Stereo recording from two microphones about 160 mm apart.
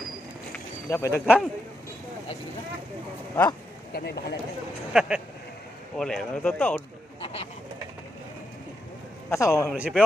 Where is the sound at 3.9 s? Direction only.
80° left.